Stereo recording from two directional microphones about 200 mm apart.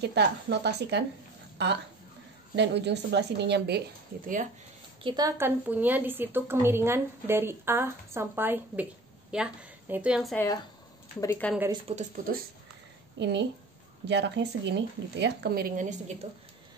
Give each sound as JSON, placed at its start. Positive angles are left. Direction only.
{"t": 0.0, "sound": "speech", "side_deg": -55}
{"t": 5.0, "sound": "a woman's voice", "side_deg": -20}
{"t": 10.3, "sound": "a woman's voice", "side_deg": 15}
{"t": 11.9, "sound": "speech", "side_deg": -35}
{"t": 13.2, "sound": "speech", "side_deg": -60}
{"t": 16.2, "sound": "speech", "side_deg": -30}